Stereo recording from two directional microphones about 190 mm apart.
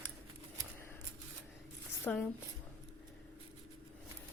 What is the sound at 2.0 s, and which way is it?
Speech, 5° left (ahead or behind).